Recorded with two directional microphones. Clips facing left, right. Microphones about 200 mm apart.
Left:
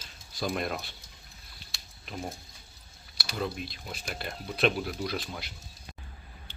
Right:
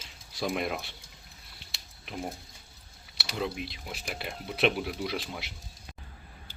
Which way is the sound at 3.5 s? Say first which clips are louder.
Right 1 dB; 70° right (ahead or behind).